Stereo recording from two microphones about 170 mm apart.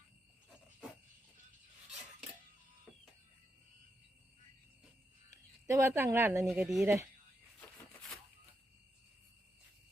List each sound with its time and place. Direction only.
5.3 s speech: 20° right (ahead or behind)
6.5 s speech: 5° right (ahead or behind)
6.8 s speech: 15° right (ahead or behind)